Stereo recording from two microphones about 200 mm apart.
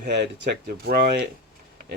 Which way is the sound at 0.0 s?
55° right (ahead or behind).